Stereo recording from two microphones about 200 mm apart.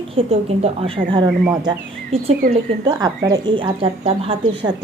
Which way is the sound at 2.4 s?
45° right (ahead or behind).